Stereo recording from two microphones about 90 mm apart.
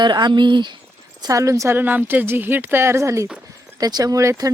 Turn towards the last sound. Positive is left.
turn(degrees=-35)  # may be behind; listen again after turning